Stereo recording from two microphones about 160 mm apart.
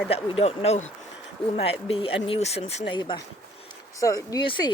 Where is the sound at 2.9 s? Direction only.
25° left (ahead or behind).